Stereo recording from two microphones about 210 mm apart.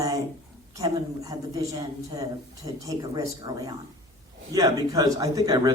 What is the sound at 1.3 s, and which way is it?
Speech, 15° right (ahead or behind).